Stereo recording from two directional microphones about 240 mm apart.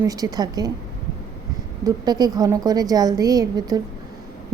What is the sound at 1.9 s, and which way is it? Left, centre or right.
A woman's voice, centre.